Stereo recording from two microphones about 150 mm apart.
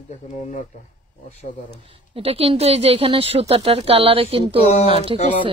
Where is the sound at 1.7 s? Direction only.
35° right (ahead or behind).